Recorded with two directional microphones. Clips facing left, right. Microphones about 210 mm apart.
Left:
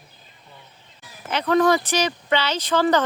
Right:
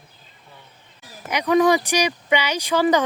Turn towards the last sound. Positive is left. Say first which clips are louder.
# right 1 dB
turn(degrees=-10)  # may be behind; listen again after turning